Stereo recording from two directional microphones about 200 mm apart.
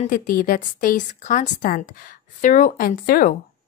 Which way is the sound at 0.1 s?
45° left (ahead or behind).